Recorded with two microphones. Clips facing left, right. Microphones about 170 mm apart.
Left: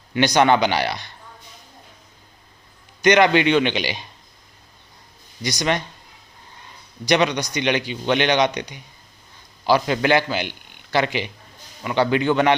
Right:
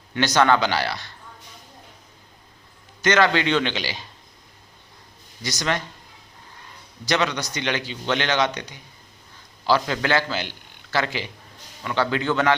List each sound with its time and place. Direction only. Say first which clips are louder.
0.1 s a man's voice: left 2 dB; 15° left (ahead or behind)
3.0 s a man's voice: left 4 dB; 15° left (ahead or behind)
5.4 s a man's voice: left 3 dB; 15° left (ahead or behind)
7.0 s a man's voice: left 4 dB; 15° left (ahead or behind)